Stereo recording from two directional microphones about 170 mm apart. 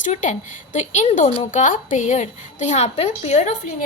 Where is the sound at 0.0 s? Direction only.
45° left (ahead or behind).